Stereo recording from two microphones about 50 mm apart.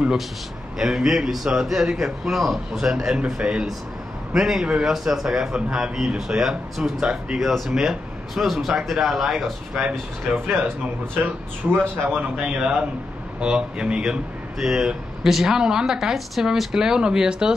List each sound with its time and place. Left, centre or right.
0.7 s speech: centre
10.3 s speech: right
11.6 s speech: right
12.4 s speech: centre